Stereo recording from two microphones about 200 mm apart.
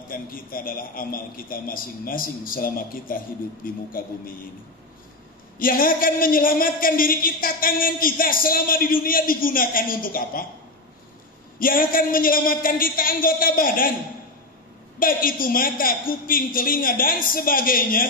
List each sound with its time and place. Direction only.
0.1 s a man's voice: 45° left (ahead or behind)
5.6 s a man's voice: 45° left (ahead or behind)
11.6 s a man's voice: 45° left (ahead or behind)
15.0 s a man's voice: 45° left (ahead or behind)